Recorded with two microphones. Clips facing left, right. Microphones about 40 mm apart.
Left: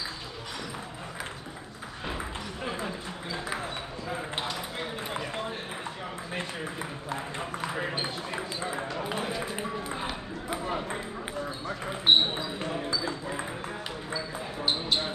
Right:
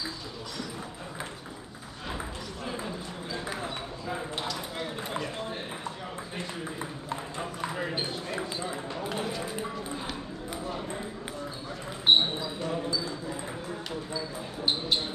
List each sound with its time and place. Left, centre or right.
9.0 s run: centre
10.5 s ping: left
12.1 s speech: centre
14.6 s speech: centre